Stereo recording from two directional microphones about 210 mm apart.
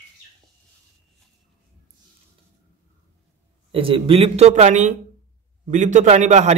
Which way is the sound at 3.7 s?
25° right (ahead or behind).